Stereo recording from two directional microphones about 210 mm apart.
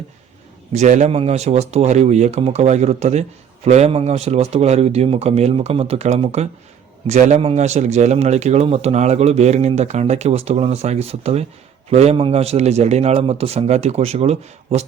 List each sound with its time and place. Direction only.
0.7 s speech: 35° right (ahead or behind)